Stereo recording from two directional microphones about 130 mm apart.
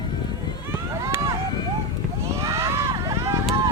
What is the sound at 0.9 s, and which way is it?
Run, 20° right (ahead or behind).